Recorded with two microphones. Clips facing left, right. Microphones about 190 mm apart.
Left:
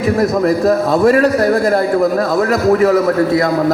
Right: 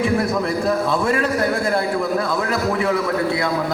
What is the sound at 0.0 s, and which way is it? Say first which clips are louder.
A man's voice: left 6 dB; 40° left (ahead or behind).